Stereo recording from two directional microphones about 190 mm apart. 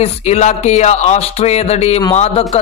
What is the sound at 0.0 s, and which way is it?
Speech, 35° left (ahead or behind).